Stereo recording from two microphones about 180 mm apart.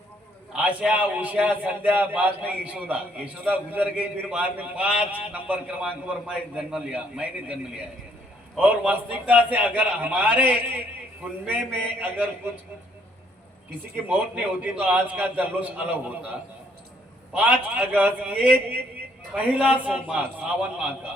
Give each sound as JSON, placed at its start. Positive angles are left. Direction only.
{"t": 0.5, "sound": "a man's voice", "side_deg": -5}
{"t": 8.5, "sound": "a man's voice", "side_deg": -10}
{"t": 13.9, "sound": "a man's voice", "side_deg": -10}
{"t": 17.3, "sound": "a man's voice", "side_deg": -10}